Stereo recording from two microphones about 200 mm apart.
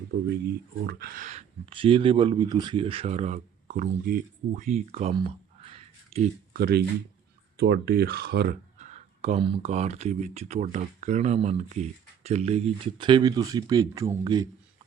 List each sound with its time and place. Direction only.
0.9 s speech: 50° right (ahead or behind); by 6.3 s 30° right (ahead or behind)
6.5 s speech: 50° right (ahead or behind); by 14.5 s 20° right (ahead or behind)